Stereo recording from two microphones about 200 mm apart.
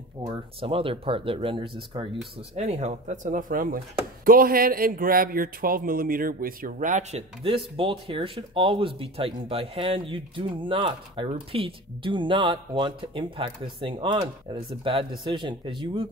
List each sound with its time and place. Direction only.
0.2 s speech: 25° right (ahead or behind)